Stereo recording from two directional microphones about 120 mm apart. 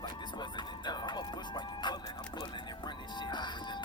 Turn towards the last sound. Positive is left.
turn(degrees=40)  # may be behind; listen again after turning